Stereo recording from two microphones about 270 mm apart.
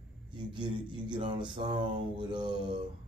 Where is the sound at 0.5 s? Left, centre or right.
Centre.